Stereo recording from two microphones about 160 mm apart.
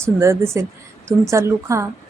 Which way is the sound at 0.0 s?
15° right (ahead or behind).